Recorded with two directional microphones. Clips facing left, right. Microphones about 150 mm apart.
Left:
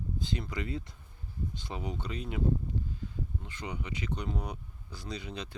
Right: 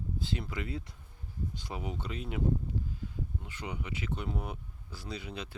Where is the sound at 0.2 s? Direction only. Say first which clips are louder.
Left 1 dB; 5° right (ahead or behind).